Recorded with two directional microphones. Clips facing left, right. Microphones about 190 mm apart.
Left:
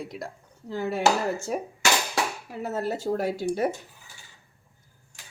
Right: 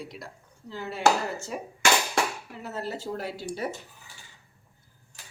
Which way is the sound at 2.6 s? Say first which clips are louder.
Left 6 dB; 50° left (ahead or behind).